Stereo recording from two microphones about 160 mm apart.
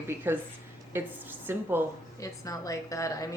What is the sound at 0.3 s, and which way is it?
A woman's voice, 15° right (ahead or behind).